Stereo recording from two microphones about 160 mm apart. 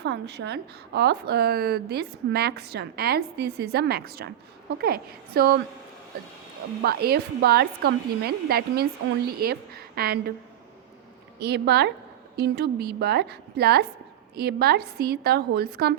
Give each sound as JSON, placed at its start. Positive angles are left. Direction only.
{"t": 0.0, "sound": "a woman's voice", "side_deg": -90}
{"t": 6.8, "sound": "a woman's voice", "side_deg": -75}
{"t": 11.3, "sound": "a woman's voice", "side_deg": -90}